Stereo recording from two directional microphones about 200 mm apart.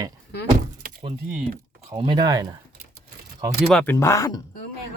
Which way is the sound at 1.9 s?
25° right (ahead or behind).